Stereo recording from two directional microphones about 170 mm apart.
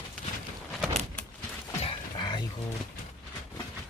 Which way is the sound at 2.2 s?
25° left (ahead or behind).